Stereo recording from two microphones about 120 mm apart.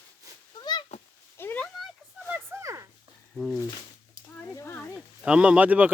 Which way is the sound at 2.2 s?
20° right (ahead or behind).